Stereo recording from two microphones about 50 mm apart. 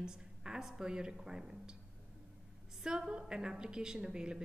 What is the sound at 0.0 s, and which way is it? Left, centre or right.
A woman's voice, centre.